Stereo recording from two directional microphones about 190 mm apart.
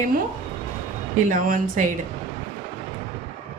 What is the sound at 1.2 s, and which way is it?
Speech, 45° right (ahead or behind).